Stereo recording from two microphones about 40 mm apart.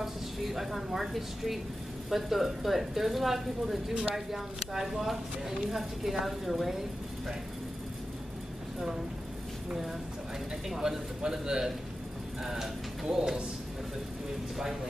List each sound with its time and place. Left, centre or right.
0.0 s a woman's voice: centre
10.7 s speech: centre